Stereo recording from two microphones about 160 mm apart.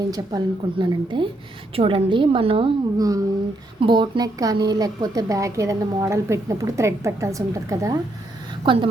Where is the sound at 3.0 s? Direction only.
20° right (ahead or behind).